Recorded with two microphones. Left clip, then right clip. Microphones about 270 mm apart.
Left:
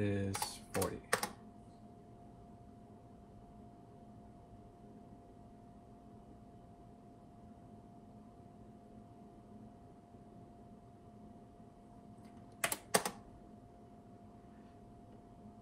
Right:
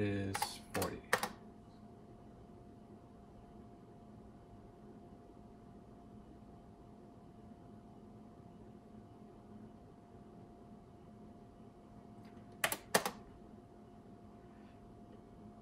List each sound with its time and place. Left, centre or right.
0.0 s a sound: centre
0.3 s typing: centre
12.6 s typing: centre